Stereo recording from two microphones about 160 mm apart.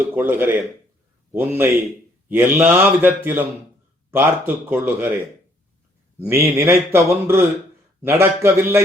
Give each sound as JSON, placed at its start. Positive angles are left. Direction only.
{"t": 0.0, "sound": "speech", "side_deg": -10}
{"t": 6.2, "sound": "speech", "side_deg": -15}